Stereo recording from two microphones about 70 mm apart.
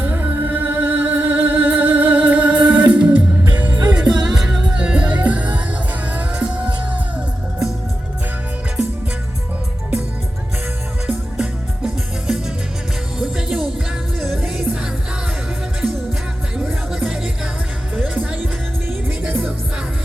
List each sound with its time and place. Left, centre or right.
0.0 s music: right
3.8 s music: centre
11.0 s music: centre
13.1 s music: centre
16.6 s music: centre